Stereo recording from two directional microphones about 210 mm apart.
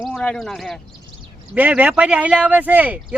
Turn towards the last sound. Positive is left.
turn(degrees=-5)  # may be behind; listen again after turning